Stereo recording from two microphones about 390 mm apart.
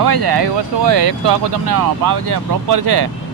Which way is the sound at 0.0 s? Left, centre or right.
Right.